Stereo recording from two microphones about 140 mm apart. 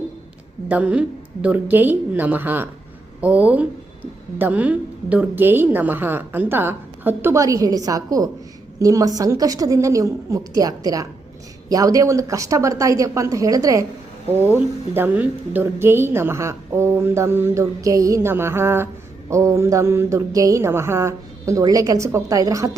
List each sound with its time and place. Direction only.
0.7 s a woman's voice: 10° right (ahead or behind); by 8.3 s 25° right (ahead or behind)
8.8 s mantra: 25° right (ahead or behind)
14.3 s a woman's voice: 15° right (ahead or behind)
19.3 s mantra: 20° right (ahead or behind)